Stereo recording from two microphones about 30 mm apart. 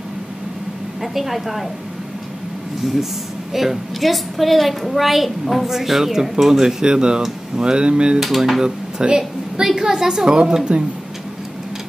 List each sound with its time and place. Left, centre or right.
1.0 s a woman's voice: centre
3.5 s a woman's voice: centre
6.8 s speech: right
8.2 s a woman's voice: centre
8.6 s a woman's voice: right
10.7 s speech: right